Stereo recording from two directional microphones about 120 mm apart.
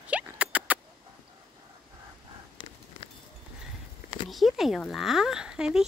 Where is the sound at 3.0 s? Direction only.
50° left (ahead or behind).